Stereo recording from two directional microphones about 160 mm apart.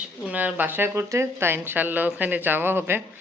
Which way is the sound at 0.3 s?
10° right (ahead or behind).